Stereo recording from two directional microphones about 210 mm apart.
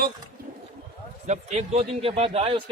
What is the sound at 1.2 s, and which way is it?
Speech, 35° right (ahead or behind).